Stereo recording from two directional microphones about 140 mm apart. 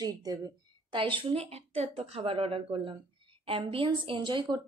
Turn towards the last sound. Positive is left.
turn(degrees=-35)  # may be behind; listen again after turning